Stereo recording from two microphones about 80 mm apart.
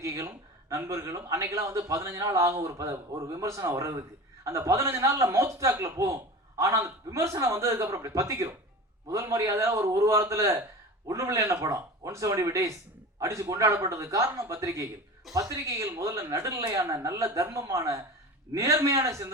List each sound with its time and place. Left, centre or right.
0.0 s a man's voice: right